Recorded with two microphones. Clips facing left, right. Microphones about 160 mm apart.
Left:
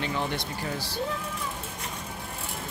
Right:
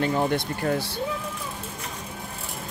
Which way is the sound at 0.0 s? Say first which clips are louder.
Right 7 dB; 45° right (ahead or behind).